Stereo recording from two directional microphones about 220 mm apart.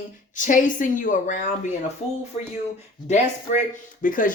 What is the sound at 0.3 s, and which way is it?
Speech, 35° left (ahead or behind).